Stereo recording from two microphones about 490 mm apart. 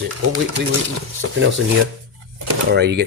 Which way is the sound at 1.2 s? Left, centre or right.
Right.